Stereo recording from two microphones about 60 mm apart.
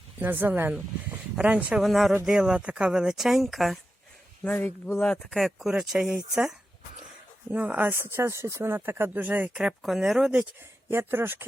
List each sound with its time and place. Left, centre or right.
0.2 s speech: right
1.4 s speech: right
1.8 s speech: centre
4.5 s speech: left
5.3 s speech: centre
7.5 s speech: right
7.9 s speech: right
9.6 s speech: centre
10.8 s speech: right